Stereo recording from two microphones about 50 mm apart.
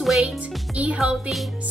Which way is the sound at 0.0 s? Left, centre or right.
Centre.